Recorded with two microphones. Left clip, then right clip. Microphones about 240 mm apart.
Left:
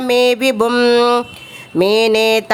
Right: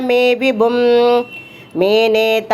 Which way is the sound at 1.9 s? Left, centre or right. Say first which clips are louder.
Right 1 dB; left.